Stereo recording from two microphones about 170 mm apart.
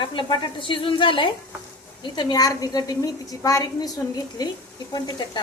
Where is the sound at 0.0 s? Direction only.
30° left (ahead or behind).